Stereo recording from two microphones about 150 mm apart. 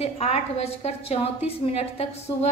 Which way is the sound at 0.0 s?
45° left (ahead or behind).